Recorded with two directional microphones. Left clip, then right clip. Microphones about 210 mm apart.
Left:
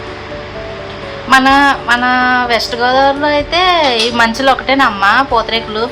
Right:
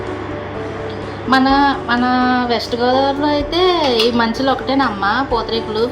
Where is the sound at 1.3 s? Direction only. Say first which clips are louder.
Left 5 dB; 35° left (ahead or behind).